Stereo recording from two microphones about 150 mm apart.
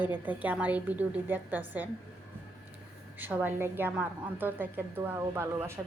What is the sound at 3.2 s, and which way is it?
A woman's voice, 10° right (ahead or behind).